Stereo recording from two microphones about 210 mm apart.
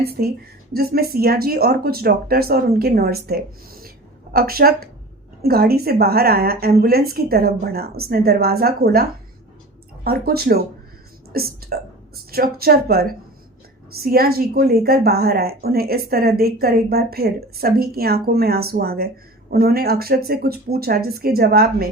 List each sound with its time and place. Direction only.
0.0 s a woman's voice: 45° right (ahead or behind)